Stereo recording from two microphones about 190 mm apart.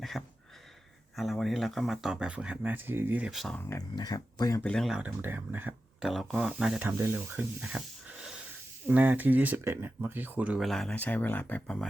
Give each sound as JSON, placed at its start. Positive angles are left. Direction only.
{"t": 0.0, "sound": "a sound", "side_deg": 0}
{"t": 1.1, "sound": "speech", "side_deg": 0}
{"t": 3.7, "sound": "speech", "side_deg": 20}
{"t": 4.6, "sound": "speech", "side_deg": 5}